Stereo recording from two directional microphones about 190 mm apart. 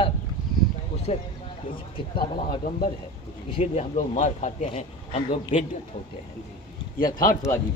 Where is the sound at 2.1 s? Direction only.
50° left (ahead or behind).